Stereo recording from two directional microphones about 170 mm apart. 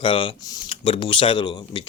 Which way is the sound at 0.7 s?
35° left (ahead or behind).